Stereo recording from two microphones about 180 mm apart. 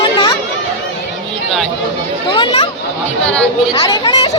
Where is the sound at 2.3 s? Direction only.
25° left (ahead or behind).